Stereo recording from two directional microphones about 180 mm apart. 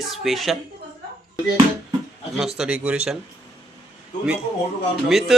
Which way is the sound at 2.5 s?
5° right (ahead or behind).